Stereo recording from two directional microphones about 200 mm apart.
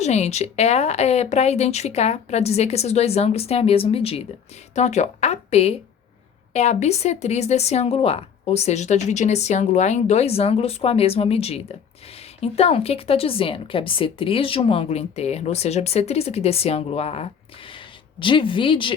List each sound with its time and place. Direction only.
0.0 s a woman's voice: 35° left (ahead or behind)